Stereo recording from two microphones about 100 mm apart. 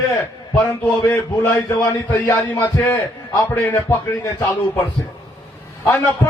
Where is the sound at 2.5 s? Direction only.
15° left (ahead or behind).